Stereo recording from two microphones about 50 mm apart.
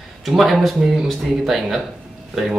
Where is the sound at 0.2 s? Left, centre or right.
Centre.